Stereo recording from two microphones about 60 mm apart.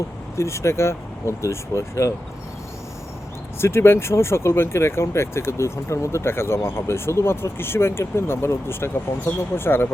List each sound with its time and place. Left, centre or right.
0.3 s speech: left
3.6 s speech: left